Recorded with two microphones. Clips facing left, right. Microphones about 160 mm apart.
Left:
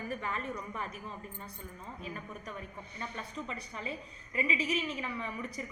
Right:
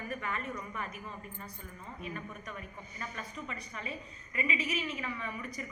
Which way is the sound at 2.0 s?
30° left (ahead or behind).